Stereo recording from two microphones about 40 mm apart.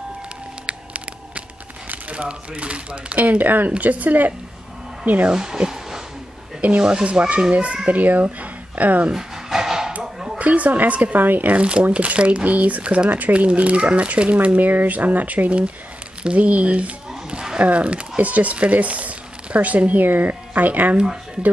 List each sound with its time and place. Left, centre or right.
0.7 s music: right
2.1 s speech: right
3.2 s speech: right
3.7 s speech: right
5.3 s a child's voice: centre; by 9.1 s right
9.1 s dog: centre
10.0 s a sound: centre
10.4 s speech: right
11.1 s speech: right
11.5 s speech: right